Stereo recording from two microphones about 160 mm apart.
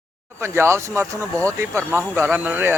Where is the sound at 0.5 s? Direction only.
15° right (ahead or behind).